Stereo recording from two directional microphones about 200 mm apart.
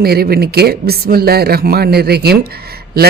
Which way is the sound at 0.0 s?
50° right (ahead or behind).